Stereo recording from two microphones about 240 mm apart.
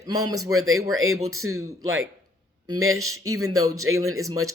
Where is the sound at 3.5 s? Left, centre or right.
Centre.